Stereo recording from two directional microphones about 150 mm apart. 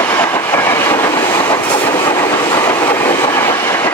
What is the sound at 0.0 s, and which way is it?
Train, 20° left (ahead or behind).